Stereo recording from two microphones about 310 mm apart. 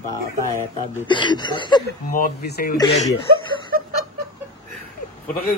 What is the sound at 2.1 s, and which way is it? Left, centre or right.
Speech, left.